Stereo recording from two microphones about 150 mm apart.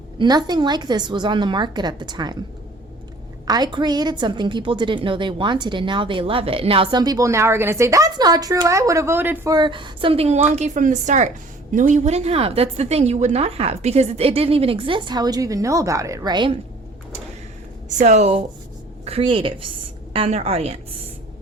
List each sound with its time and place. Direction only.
0.2 s a woman's voice: 30° right (ahead or behind)
3.4 s a woman's voice: 25° right (ahead or behind)
9.5 s a woman's voice: 30° right (ahead or behind)
10.5 s a woman's voice: 55° right (ahead or behind); by 16.5 s 30° right (ahead or behind)
17.8 s a woman's voice: 50° right (ahead or behind)